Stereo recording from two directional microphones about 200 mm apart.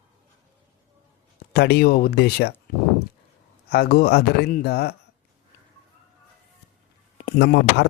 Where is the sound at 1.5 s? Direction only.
55° left (ahead or behind).